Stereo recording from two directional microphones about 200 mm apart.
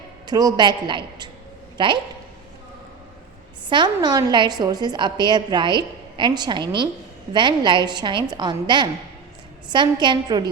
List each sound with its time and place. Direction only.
0.3 s a woman's voice: 20° right (ahead or behind)
3.7 s a woman's voice: 20° right (ahead or behind)